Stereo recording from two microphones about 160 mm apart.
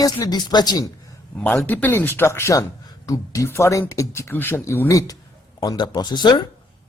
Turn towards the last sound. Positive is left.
turn(degrees=25)  # may be behind; listen again after turning